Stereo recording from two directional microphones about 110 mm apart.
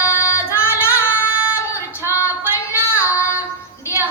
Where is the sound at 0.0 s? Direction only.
25° left (ahead or behind).